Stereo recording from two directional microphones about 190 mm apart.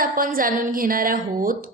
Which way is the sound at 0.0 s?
50° right (ahead or behind).